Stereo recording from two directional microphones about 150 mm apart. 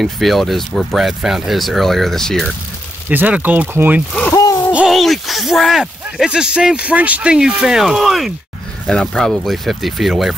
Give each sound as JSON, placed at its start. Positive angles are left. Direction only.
{"t": 0.0, "sound": "speech", "side_deg": 0}
{"t": 3.1, "sound": "speech", "side_deg": -10}
{"t": 4.3, "sound": "a sound", "side_deg": 20}
{"t": 4.7, "sound": "speech", "side_deg": 0}